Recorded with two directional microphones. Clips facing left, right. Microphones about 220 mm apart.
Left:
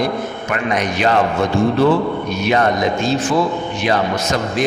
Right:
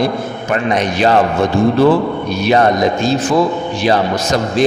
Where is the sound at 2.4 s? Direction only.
35° right (ahead or behind).